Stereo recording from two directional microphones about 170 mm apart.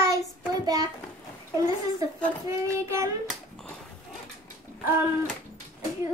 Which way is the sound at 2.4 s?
15° right (ahead or behind).